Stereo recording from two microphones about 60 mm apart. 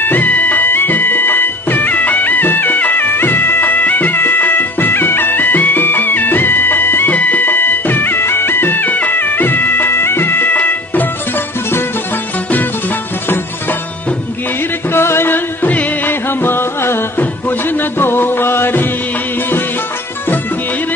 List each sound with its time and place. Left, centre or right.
0.0 s music: left
14.9 s music: left